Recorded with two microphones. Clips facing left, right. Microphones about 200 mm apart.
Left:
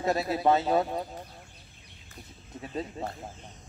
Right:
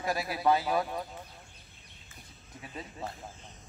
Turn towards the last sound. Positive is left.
turn(degrees=30)  # may be behind; listen again after turning